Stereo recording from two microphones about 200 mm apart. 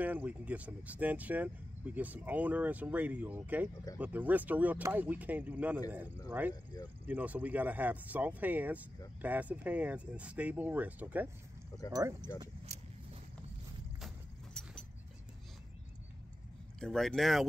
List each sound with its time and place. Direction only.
0.0 s speech: 10° right (ahead or behind)
14.0 s vehicle: 5° left (ahead or behind)
16.8 s speech: centre (ahead or behind)